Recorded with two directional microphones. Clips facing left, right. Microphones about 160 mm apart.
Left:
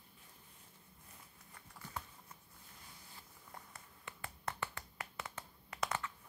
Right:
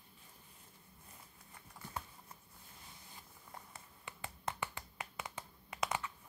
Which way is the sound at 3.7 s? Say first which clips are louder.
Right 1 dB; 20° right (ahead or behind).